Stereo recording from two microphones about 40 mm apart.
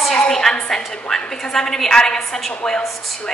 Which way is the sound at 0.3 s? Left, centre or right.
Centre.